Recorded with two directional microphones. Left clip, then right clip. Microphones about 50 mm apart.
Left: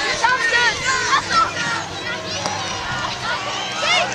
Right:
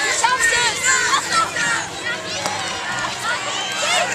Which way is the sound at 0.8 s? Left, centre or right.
Right.